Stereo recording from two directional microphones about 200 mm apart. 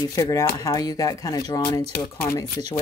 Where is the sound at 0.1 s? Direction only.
15° left (ahead or behind).